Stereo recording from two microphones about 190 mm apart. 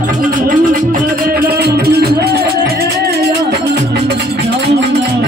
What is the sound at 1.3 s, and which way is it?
Music, 55° right (ahead or behind).